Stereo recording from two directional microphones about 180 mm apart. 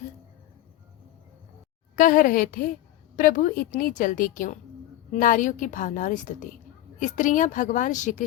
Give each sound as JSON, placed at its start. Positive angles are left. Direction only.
{"t": 2.0, "sound": "a woman's voice", "side_deg": 50}